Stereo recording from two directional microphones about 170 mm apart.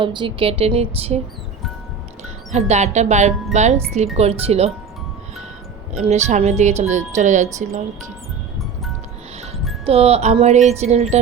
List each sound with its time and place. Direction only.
0.0 s speech: 30° right (ahead or behind)
2.5 s speech: 45° right (ahead or behind)
5.9 s speech: 40° right (ahead or behind)
9.8 s speech: 35° right (ahead or behind)